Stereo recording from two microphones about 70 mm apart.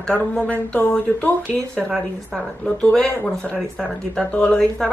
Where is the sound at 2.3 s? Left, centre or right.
Centre.